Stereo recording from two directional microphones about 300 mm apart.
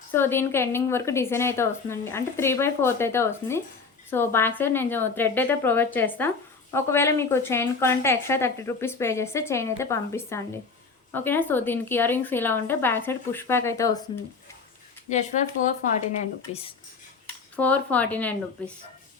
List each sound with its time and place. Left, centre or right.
0.1 s a woman's voice: centre
16.5 s speech: centre
17.6 s speech: centre